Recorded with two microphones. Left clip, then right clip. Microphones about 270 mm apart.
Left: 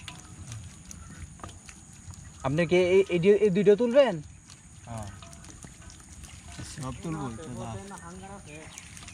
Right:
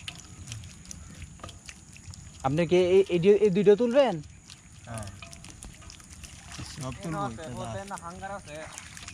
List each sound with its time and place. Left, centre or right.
0.0 s music: centre
2.4 s speech: centre
6.6 s a sound: centre
7.1 s speech: centre
7.5 s speech: centre
7.9 s speech: centre